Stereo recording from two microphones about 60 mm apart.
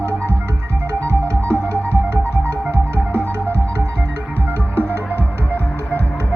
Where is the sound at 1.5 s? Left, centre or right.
Right.